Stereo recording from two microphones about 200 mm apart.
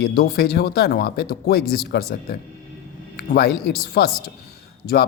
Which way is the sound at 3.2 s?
50° left (ahead or behind).